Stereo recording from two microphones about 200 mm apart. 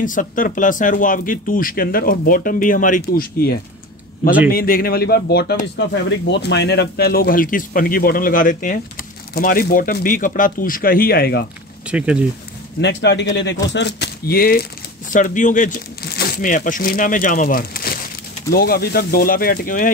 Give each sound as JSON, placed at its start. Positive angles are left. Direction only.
{"t": 0.0, "sound": "speech", "side_deg": 40}
{"t": 11.9, "sound": "speech", "side_deg": -5}
{"t": 12.8, "sound": "a man's voice", "side_deg": 60}